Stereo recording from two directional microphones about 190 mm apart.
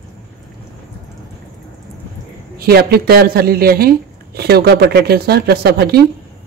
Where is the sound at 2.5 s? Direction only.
55° right (ahead or behind).